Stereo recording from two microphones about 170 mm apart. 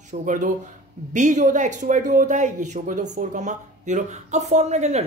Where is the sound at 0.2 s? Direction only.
50° right (ahead or behind).